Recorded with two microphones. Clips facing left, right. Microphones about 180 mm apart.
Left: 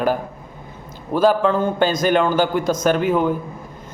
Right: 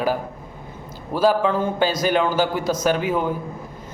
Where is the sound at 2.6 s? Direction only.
50° left (ahead or behind).